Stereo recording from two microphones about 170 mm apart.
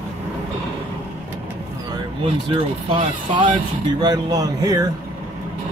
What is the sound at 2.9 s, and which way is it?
Speech, 30° right (ahead or behind).